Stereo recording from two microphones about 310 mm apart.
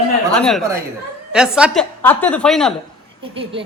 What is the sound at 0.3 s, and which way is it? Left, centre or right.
A man's voice, centre.